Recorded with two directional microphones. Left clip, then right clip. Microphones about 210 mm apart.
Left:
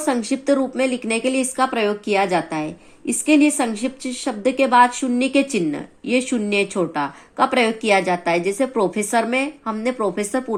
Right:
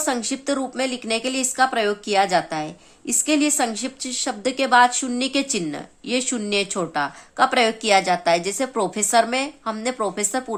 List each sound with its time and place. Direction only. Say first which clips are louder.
0.0 s speech: left 3 dB; 15° right (ahead or behind)